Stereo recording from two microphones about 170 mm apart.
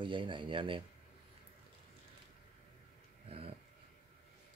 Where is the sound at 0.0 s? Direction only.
30° right (ahead or behind).